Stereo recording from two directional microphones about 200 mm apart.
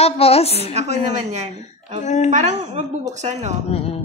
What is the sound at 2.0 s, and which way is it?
Speech, 35° left (ahead or behind).